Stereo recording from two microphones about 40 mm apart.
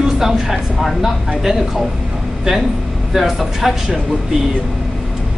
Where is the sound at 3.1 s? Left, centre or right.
Centre.